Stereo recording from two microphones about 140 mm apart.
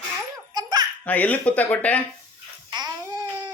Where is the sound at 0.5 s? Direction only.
30° right (ahead or behind).